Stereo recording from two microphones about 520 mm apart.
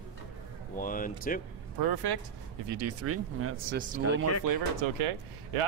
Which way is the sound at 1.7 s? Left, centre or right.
Right.